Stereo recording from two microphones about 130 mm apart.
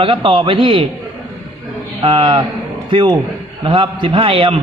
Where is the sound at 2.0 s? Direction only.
45° right (ahead or behind).